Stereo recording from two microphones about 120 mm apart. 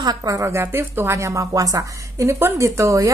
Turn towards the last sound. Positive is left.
turn(degrees=-25)  # may be behind; listen again after turning